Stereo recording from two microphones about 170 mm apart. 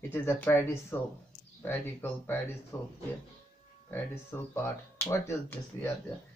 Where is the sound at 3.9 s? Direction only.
15° left (ahead or behind).